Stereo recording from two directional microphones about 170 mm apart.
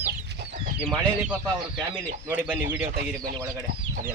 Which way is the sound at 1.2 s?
5° right (ahead or behind).